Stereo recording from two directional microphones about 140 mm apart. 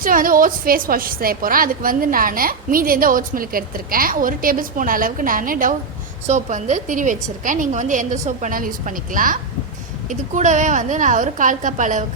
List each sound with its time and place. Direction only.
0.0 s a woman's voice: 80° right
6.2 s a woman's voice: 60° right (ahead or behind); by 9.4 s 75° right (ahead or behind)
10.1 s a woman's voice: 60° right (ahead or behind)